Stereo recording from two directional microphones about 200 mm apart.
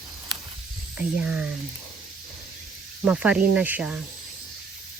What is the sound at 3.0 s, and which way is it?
Speech, 5° right (ahead or behind).